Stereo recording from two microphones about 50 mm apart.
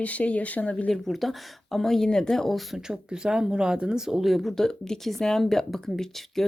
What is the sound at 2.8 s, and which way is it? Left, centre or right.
A woman's voice, centre.